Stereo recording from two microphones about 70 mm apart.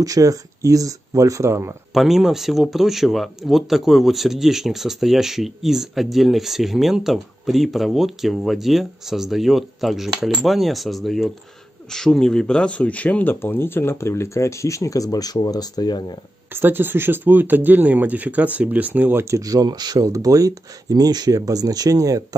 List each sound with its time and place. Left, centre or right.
0.0 s speech: right
2.0 s speech: centre; by 16.2 s left
16.5 s speech: right
19.2 s speech: right